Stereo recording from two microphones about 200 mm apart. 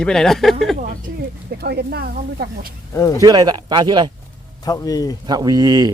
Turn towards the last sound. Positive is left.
turn(degrees=-20)  # may be behind; listen again after turning